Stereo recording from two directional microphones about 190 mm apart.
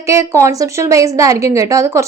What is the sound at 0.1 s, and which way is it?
A woman's voice, 15° right (ahead or behind).